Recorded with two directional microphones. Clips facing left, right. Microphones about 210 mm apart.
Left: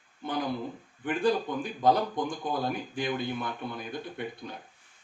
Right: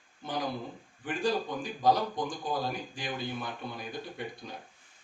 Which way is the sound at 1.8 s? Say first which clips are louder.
Left 2 dB; 55° left (ahead or behind).